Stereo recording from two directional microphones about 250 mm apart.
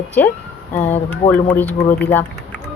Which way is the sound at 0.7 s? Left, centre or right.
Left.